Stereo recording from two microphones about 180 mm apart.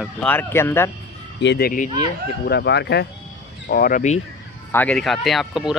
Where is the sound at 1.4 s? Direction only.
75° left (ahead or behind).